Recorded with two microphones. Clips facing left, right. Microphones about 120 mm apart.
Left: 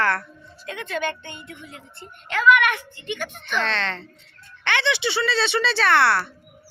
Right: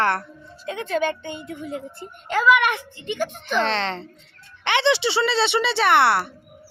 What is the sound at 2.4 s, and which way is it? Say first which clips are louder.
Speech: even; 30° right (ahead or behind).